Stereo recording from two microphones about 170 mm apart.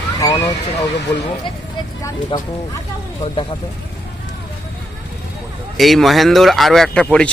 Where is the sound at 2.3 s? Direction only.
30° left (ahead or behind).